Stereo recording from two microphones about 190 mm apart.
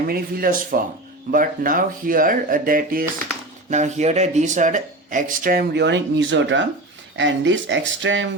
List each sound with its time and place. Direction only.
0.1 s speech: 50° right (ahead or behind); by 8.3 s 70° right (ahead or behind)